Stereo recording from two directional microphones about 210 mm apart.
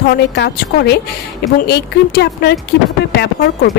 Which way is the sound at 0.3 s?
50° left (ahead or behind).